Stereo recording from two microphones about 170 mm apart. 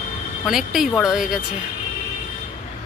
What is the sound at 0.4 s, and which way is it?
Speech, centre (ahead or behind).